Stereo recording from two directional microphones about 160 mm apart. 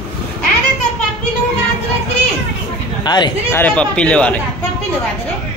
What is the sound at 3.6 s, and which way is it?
Speech, 10° left (ahead or behind).